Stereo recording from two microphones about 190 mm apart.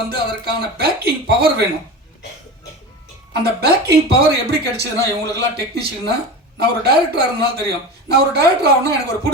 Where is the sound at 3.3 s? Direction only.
60° right (ahead or behind).